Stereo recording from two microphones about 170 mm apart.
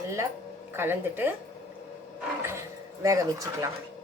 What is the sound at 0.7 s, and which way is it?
Speech, 15° right (ahead or behind).